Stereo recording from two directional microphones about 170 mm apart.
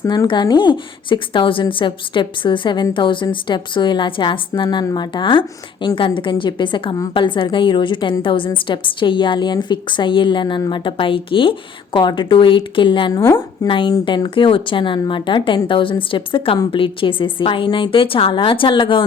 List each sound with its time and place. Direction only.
0.0 s a woman's voice: 20° left (ahead or behind)
13.2 s speech: 15° left (ahead or behind)
13.7 s a woman's voice: 30° left (ahead or behind)